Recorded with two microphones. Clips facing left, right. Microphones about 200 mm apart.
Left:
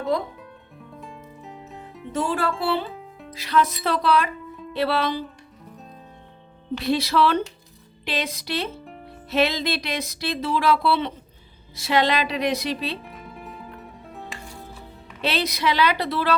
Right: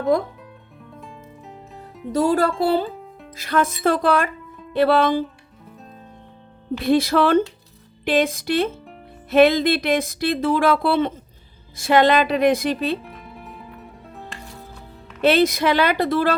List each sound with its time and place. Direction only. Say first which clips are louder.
0.1 s speech: right 3 dB; 50° right (ahead or behind)
0.8 s music: even; centre (ahead or behind)
2.1 s speech: right 6 dB; 40° right (ahead or behind)
2.9 s music: right 1 dB; centre (ahead or behind)
3.3 s speech: right 1 dB; 50° right (ahead or behind)
6.7 s speech: right 4 dB; 50° right (ahead or behind)
13.0 s music: even; centre (ahead or behind)
15.2 s speech: right 8 dB; 50° right (ahead or behind)